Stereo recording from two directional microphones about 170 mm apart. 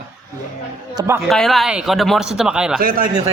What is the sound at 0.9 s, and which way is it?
Speech, 15° right (ahead or behind).